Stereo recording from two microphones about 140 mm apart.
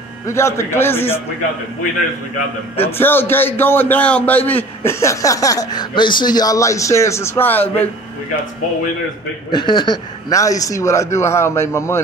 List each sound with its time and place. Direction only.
0.3 s a man's voice: 20° left (ahead or behind)
2.8 s a man's voice: 15° left (ahead or behind)
9.5 s a man's voice: 30° left (ahead or behind)